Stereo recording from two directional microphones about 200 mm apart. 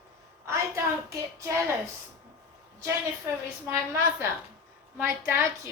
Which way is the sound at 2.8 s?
10° right (ahead or behind).